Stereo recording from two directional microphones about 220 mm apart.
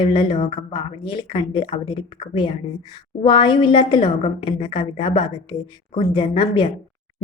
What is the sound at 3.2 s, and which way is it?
A woman's voice, 20° left (ahead or behind).